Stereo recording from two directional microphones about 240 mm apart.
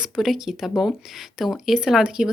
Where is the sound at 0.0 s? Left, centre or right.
Centre.